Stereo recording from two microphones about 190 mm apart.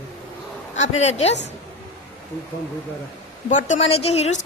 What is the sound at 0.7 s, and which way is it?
Speech, 35° left (ahead or behind).